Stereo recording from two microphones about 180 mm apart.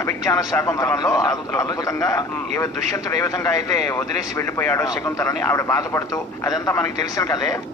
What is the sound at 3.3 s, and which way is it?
A man's voice, 15° left (ahead or behind).